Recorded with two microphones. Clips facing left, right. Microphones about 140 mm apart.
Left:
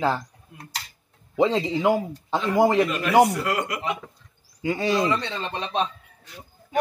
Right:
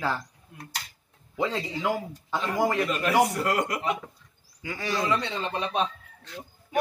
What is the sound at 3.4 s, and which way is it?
Speech, 40° right (ahead or behind).